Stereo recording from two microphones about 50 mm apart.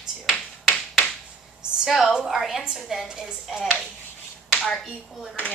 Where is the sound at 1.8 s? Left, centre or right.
Centre.